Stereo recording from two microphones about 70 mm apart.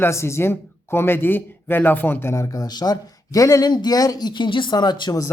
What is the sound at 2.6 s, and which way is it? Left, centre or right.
Speech, left.